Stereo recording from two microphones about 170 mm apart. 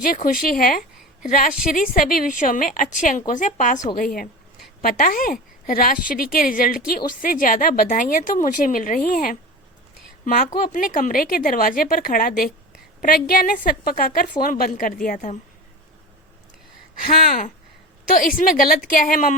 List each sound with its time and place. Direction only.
0.0 s a woman's voice: 55° left (ahead or behind)
17.1 s a woman's voice: 60° left (ahead or behind)